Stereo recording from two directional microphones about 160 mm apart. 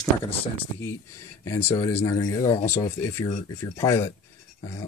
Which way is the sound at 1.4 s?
20° left (ahead or behind).